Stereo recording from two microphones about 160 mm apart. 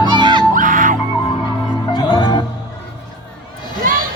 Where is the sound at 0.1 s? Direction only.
30° right (ahead or behind).